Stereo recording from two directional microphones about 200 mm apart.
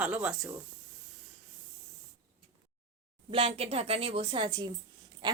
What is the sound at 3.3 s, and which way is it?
Speech, 30° right (ahead or behind).